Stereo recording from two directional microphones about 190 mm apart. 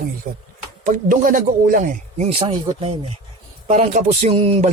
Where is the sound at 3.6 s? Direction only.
40° right (ahead or behind).